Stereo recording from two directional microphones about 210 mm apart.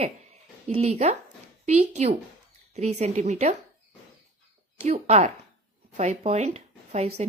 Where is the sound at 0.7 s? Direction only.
30° right (ahead or behind).